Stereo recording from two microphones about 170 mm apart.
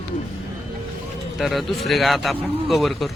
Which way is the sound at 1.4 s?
Centre (ahead or behind).